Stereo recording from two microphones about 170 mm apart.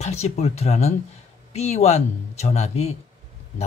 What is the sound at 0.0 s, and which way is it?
Speech, 40° left (ahead or behind).